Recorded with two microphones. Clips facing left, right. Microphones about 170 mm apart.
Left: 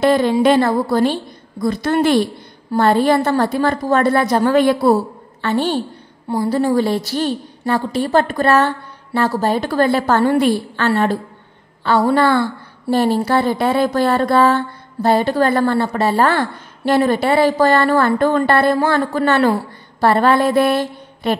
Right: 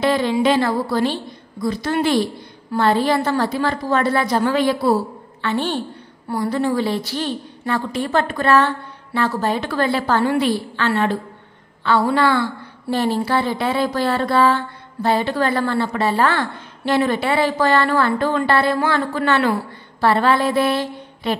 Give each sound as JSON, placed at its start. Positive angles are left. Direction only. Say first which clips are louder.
{"t": 0.0, "sound": "a woman's voice", "louder": "left 4 dB", "side_deg": 45}
{"t": 5.4, "sound": "a woman's voice", "louder": "left 4 dB", "side_deg": 40}